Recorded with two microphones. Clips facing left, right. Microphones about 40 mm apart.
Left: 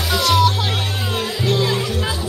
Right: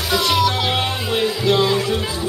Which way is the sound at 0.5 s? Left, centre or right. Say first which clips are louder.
Right 2 dB; right.